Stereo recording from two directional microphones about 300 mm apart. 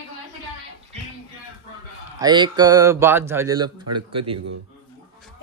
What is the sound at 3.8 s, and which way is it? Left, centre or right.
Speech, right.